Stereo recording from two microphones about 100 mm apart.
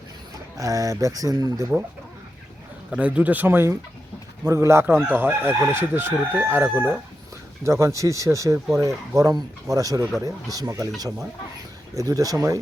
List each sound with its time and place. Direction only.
0.5 s speech: 35° right (ahead or behind)
2.9 s speech: 15° right (ahead or behind)
4.4 s crowing: 30° right (ahead or behind)
7.6 s speech: 30° right (ahead or behind)